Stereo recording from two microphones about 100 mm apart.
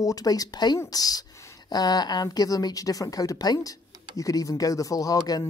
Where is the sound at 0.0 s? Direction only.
40° left (ahead or behind).